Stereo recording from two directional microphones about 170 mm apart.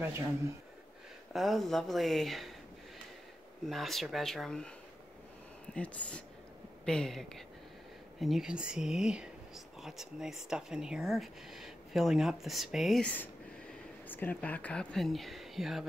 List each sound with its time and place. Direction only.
1.3 s speech: centre (ahead or behind)
3.6 s speech: centre (ahead or behind)
5.8 s speech: 5° left (ahead or behind)